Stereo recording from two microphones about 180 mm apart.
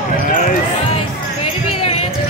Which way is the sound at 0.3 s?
50° left (ahead or behind).